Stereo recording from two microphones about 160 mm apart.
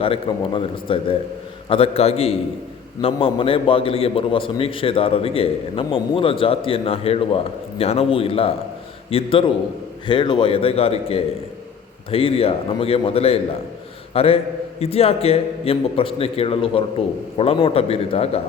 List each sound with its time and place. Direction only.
0.0 s a man's voice: 35° left (ahead or behind)